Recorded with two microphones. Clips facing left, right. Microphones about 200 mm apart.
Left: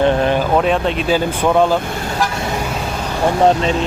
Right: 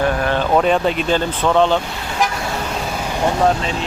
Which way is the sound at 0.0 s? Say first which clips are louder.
Left 4 dB; 25° left (ahead or behind).